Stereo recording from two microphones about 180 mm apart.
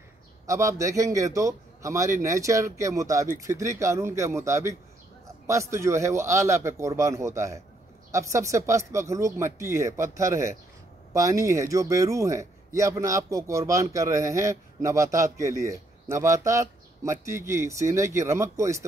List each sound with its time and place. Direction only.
0.5 s speech: 15° right (ahead or behind)